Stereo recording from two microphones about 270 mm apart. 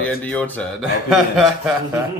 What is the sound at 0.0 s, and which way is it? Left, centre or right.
Speech, centre.